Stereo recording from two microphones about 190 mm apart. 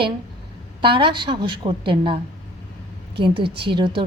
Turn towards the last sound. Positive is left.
turn(degrees=-25)  # may be behind; listen again after turning